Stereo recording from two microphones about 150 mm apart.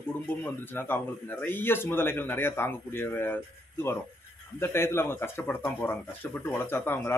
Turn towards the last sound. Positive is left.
turn(degrees=15)  # may be behind; listen again after turning